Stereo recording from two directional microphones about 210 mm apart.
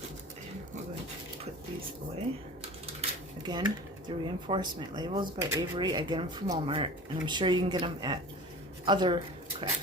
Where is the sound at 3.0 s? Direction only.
20° right (ahead or behind).